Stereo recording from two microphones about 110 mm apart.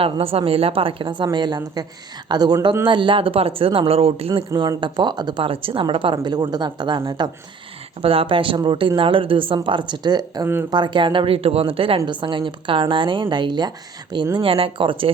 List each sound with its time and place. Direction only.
0.0 s a woman's voice: 60° right (ahead or behind)
4.3 s a woman's voice: 45° right (ahead or behind)
8.0 s a woman's voice: 55° right (ahead or behind); by 10.4 s 40° right (ahead or behind)
10.4 s speech: 20° right (ahead or behind)
10.7 s a woman's voice: 40° right (ahead or behind)
14.3 s speech: 55° right (ahead or behind)